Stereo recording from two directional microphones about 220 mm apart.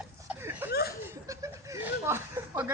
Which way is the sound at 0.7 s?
45° left (ahead or behind).